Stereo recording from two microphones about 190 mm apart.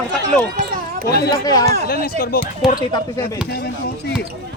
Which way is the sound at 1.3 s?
20° left (ahead or behind).